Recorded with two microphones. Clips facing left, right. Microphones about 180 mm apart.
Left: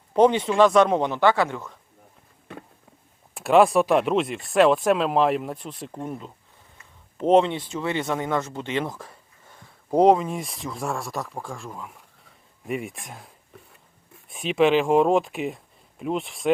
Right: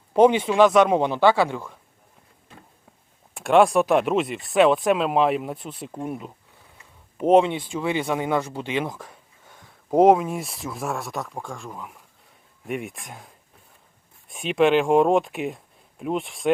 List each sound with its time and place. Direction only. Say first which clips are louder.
0.1 s speech: right 2 dB; 10° right (ahead or behind)
0.9 s speech: right 2 dB; 15° right (ahead or behind)
2.5 s a sound: left 9 dB; 65° left (ahead or behind)
3.3 s speech: even; 5° left (ahead or behind)